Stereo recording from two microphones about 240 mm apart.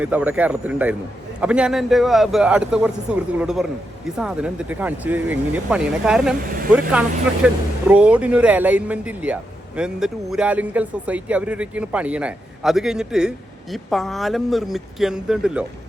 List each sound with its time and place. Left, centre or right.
0.0 s speech: centre
7.4 s speech: centre